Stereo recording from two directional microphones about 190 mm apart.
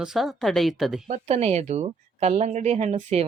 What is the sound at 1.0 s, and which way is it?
Speech, 35° right (ahead or behind).